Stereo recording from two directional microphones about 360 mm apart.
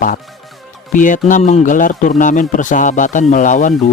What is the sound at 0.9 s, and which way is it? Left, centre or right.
A man's voice, left.